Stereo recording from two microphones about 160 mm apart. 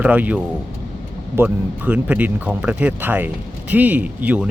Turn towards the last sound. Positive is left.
turn(degrees=-10)  # may be behind; listen again after turning